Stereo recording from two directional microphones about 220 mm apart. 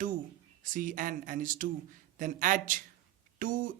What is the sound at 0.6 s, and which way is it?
Speech, 35° right (ahead or behind).